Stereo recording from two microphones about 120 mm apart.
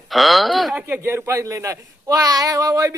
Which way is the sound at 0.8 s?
15° right (ahead or behind).